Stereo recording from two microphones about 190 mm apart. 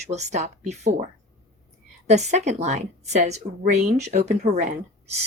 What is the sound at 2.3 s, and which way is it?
Speech, 35° right (ahead or behind).